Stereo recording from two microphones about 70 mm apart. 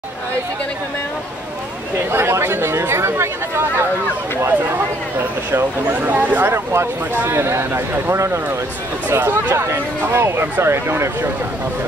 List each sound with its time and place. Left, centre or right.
2.0 s speech: right
5.9 s speech: right
6.5 s speech: right